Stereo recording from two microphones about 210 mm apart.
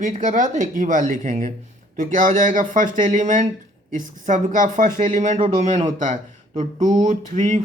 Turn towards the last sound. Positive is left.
turn(degrees=-35)  # may be behind; listen again after turning